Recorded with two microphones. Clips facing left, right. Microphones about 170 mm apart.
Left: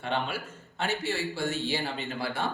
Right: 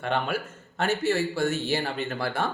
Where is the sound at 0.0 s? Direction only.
50° right (ahead or behind).